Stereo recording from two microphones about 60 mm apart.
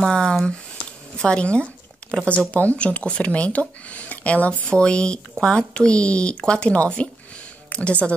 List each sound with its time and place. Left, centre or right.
0.0 s speech: centre